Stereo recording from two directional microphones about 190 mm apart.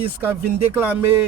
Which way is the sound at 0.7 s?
10° right (ahead or behind).